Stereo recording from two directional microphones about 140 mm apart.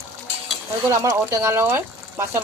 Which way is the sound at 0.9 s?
25° right (ahead or behind).